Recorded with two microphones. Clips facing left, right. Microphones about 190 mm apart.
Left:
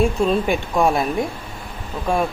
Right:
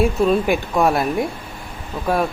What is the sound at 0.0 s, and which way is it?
Speech, 5° right (ahead or behind).